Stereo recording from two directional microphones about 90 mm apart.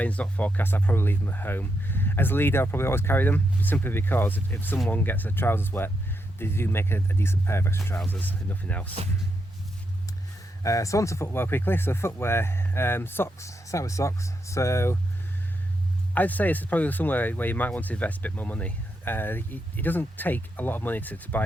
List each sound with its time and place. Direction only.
0.0 s speech: 15° left (ahead or behind)
7.9 s speech: 15° left (ahead or behind)
10.6 s speech: 35° left (ahead or behind)
16.1 s speech: 20° left (ahead or behind)